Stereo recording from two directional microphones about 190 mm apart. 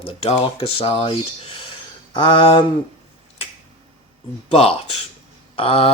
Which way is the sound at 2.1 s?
25° left (ahead or behind).